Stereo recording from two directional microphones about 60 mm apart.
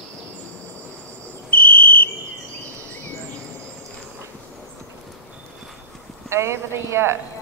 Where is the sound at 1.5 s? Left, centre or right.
Left.